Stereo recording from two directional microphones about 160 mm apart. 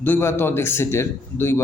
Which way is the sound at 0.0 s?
15° left (ahead or behind).